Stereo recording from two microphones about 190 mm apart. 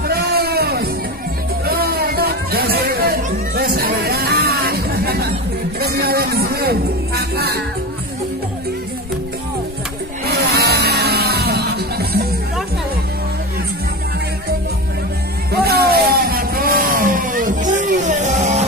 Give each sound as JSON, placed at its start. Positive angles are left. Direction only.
{"t": 0.1, "sound": "music", "side_deg": -55}
{"t": 10.2, "sound": "a sound", "side_deg": -55}
{"t": 15.5, "sound": "vehicle", "side_deg": -55}